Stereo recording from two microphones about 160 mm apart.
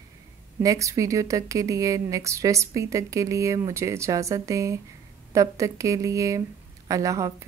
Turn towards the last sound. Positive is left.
turn(degrees=-20)  # may be behind; listen again after turning